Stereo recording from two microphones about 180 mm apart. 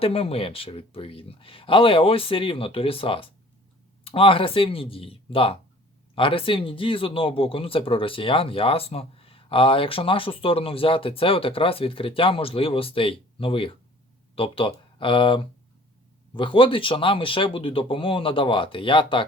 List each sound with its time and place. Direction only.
0.0 s speech: 35° left (ahead or behind)